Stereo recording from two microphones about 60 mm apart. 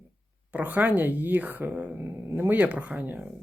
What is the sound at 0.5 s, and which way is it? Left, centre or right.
Speech, right.